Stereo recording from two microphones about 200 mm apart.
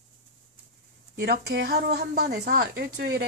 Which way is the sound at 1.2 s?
50° right (ahead or behind).